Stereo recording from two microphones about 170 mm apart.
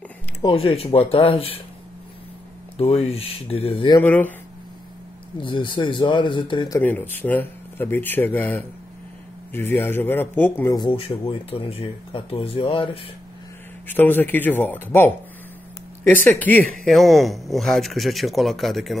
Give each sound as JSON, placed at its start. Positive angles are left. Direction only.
{"t": 0.4, "sound": "speech", "side_deg": 30}
{"t": 2.8, "sound": "speech", "side_deg": 35}
{"t": 4.0, "sound": "speech", "side_deg": 10}
{"t": 5.4, "sound": "speech", "side_deg": 30}
{"t": 6.8, "sound": "speech", "side_deg": 10}
{"t": 10.8, "sound": "speech", "side_deg": 30}
{"t": 13.8, "sound": "speech", "side_deg": 10}
{"t": 16.3, "sound": "speech", "side_deg": 10}